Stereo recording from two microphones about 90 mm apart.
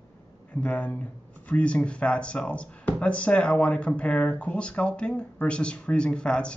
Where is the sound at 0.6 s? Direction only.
15° left (ahead or behind).